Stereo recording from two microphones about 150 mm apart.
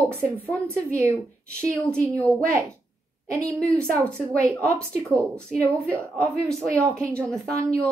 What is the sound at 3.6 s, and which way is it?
Speech, 5° left (ahead or behind).